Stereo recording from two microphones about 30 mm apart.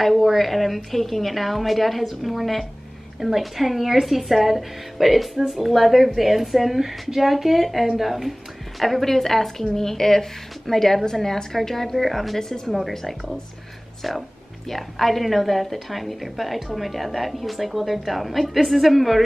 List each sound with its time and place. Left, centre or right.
0.0 s a woman's voice: centre
12.4 s a woman's voice: centre
14.0 s a woman's voice: centre